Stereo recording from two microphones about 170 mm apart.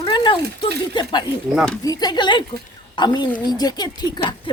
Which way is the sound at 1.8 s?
20° left (ahead or behind).